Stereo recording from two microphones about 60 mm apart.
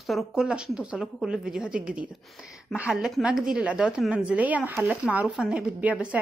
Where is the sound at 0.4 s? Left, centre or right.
Centre.